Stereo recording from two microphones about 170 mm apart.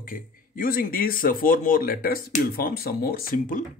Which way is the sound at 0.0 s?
55° left (ahead or behind).